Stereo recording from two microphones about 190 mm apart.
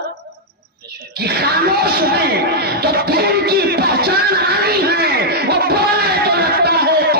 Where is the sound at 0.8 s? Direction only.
55° right (ahead or behind).